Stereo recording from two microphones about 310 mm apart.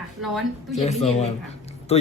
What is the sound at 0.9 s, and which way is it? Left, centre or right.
A man's voice, left.